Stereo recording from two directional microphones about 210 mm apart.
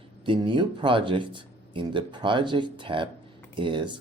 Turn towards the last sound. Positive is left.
turn(degrees=-20)  # may be behind; listen again after turning